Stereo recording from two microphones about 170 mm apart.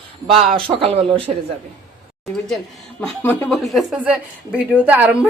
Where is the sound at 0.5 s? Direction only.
35° right (ahead or behind).